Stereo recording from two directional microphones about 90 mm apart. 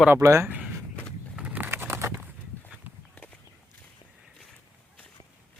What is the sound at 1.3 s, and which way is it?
Bird, 15° right (ahead or behind).